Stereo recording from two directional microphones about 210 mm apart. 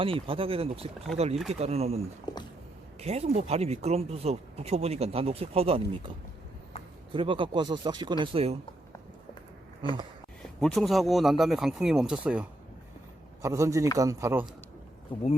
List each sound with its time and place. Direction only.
0.0 s speech: 25° right (ahead or behind)
3.0 s speech: 30° right (ahead or behind)
7.1 s speech: 25° right (ahead or behind)
10.6 s a man's voice: centre (ahead or behind)